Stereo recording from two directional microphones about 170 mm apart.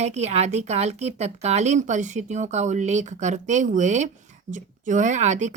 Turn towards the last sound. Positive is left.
turn(degrees=-45)  # may be behind; listen again after turning